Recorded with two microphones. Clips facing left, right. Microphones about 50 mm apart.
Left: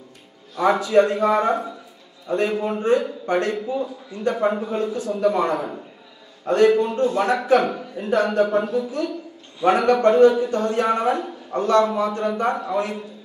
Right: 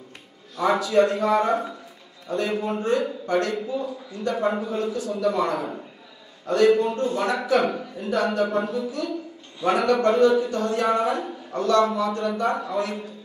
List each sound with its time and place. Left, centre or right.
0.6 s a man's voice: left